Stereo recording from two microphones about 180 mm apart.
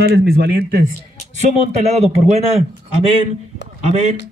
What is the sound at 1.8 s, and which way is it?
Speech, 35° right (ahead or behind).